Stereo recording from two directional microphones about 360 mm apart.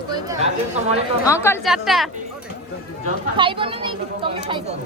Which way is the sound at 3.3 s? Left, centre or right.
Centre.